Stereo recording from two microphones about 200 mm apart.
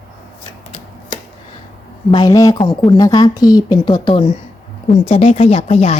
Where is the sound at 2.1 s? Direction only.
20° left (ahead or behind).